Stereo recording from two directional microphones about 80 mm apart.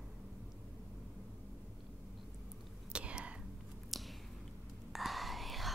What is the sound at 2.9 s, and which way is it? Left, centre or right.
Whispering, centre.